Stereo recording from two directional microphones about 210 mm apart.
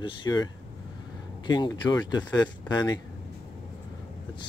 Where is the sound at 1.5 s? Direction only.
20° left (ahead or behind).